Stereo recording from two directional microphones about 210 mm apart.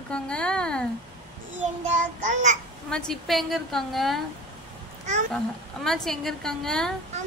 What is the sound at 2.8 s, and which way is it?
A woman's voice, 5° left (ahead or behind).